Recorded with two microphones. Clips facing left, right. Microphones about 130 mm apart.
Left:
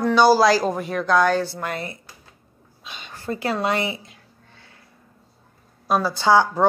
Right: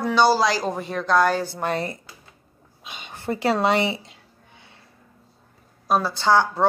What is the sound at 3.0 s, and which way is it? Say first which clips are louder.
Speech: right 2 dB; 20° right (ahead or behind).